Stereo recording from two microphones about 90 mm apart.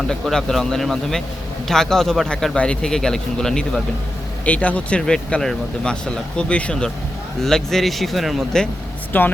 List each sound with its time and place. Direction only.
0.1 s a man's voice: 5° left (ahead or behind)
9.1 s speech: 20° left (ahead or behind)